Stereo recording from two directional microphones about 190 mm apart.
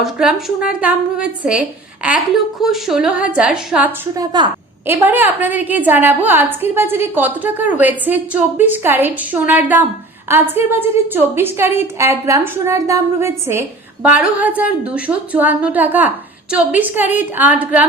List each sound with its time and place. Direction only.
0.0 s a woman's voice: 5° right (ahead or behind)
4.1 s a woman's voice: 20° right (ahead or behind)
4.9 s a woman's voice: 10° right (ahead or behind)